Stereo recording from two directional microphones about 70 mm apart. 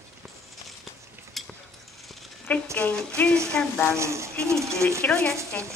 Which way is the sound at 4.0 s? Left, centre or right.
Right.